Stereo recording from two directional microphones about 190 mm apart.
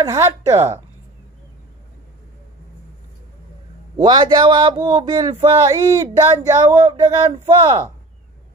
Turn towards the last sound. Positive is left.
turn(degrees=-25)  # may be behind; listen again after turning